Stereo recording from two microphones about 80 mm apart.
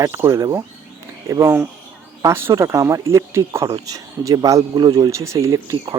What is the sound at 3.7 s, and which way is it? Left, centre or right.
Speech, right.